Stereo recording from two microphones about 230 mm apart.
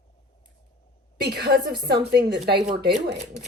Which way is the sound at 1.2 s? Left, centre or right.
Right.